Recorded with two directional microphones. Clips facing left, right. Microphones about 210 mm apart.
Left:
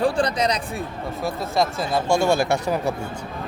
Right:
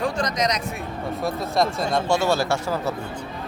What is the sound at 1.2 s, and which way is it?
Speech, centre (ahead or behind).